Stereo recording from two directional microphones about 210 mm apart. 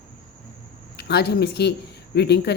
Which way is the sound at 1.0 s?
50° left (ahead or behind).